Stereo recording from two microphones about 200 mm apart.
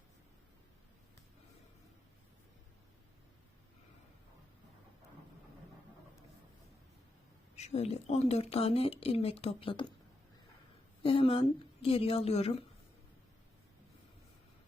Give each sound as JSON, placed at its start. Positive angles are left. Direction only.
{"t": 7.5, "sound": "speech", "side_deg": 35}
{"t": 11.0, "sound": "a woman's voice", "side_deg": 25}